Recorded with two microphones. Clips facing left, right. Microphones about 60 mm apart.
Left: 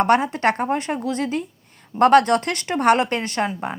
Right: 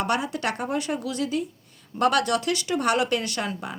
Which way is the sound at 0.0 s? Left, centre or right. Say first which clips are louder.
Left 8 dB; left.